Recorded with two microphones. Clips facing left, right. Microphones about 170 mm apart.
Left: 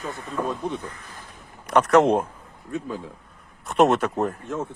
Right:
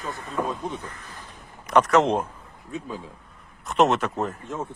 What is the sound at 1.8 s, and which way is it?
Speech, 50° left (ahead or behind).